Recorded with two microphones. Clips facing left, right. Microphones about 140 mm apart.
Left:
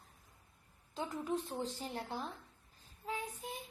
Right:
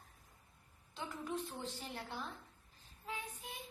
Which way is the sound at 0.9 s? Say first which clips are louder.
Left 5 dB; 40° left (ahead or behind).